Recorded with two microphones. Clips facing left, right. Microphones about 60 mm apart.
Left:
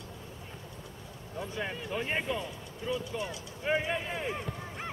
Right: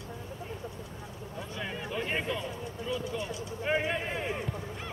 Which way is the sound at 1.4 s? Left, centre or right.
Centre.